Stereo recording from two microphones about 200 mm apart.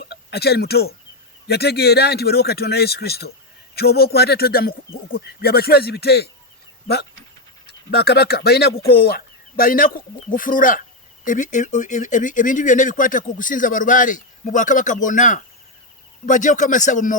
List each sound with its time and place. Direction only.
0.0 s a man's voice: 55° left (ahead or behind)